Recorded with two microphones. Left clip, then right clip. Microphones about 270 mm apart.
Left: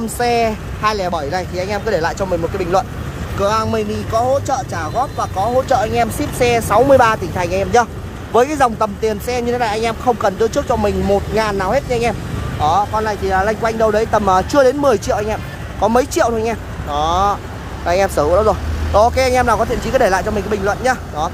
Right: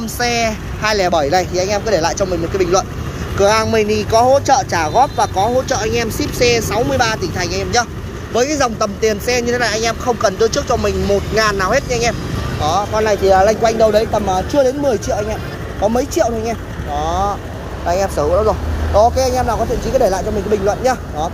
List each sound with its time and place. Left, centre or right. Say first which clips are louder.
0.2 s speech: left 1 dB; centre
14.1 s speech: left 3 dB; left
14.5 s speech: even; centre
18.0 s speech: left 1 dB; left
19.1 s speech: left 2 dB; centre